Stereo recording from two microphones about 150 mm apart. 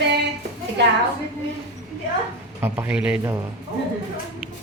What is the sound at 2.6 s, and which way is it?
Speech, 15° right (ahead or behind).